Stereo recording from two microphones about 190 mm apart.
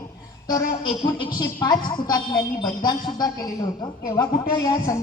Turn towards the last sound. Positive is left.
turn(degrees=20)  # may be behind; listen again after turning